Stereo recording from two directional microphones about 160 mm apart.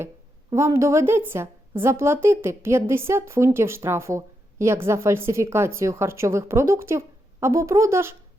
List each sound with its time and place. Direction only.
0.5 s a woman's voice: 15° right (ahead or behind)